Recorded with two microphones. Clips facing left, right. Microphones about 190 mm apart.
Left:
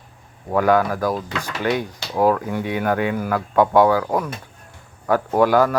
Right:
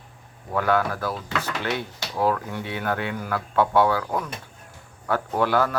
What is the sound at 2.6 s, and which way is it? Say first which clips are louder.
Speech: left 7 dB; 10° left (ahead or behind).